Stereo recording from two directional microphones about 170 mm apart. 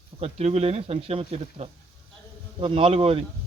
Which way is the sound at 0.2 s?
35° right (ahead or behind).